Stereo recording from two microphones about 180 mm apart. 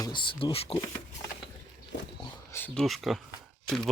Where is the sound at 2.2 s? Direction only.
15° left (ahead or behind).